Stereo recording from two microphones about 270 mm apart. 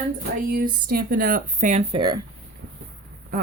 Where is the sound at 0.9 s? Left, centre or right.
Right.